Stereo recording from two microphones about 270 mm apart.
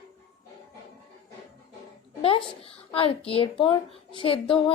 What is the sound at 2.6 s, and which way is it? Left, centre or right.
A woman's voice, left.